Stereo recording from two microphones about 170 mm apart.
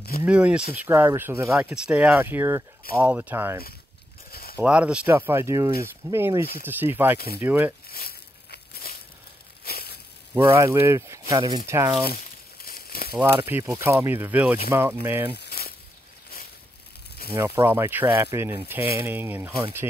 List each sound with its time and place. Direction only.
0.2 s speech: 5° right (ahead or behind)
4.3 s a sound: 65° left (ahead or behind)
4.6 s speech: 5° right (ahead or behind)
7.9 s a sound: 65° left (ahead or behind)
10.3 s speech: 15° right (ahead or behind)
12.6 s crumpling: 60° left (ahead or behind)
13.1 s speech: 15° right (ahead or behind)
15.3 s a sound: 70° left (ahead or behind)
17.3 s speech: 15° right (ahead or behind)